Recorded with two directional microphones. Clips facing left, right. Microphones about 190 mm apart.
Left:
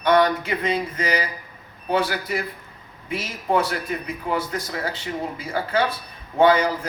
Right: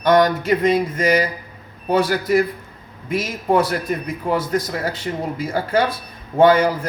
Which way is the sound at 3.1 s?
45° right (ahead or behind).